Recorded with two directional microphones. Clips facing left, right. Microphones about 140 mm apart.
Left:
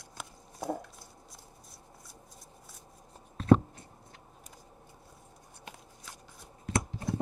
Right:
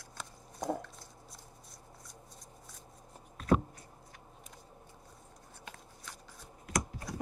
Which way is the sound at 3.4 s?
30° left (ahead or behind).